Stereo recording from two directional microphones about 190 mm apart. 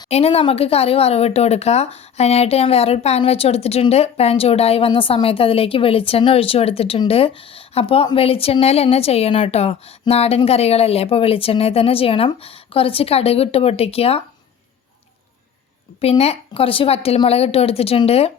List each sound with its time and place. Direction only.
0.1 s speech: 35° left (ahead or behind)
16.0 s speech: 30° left (ahead or behind)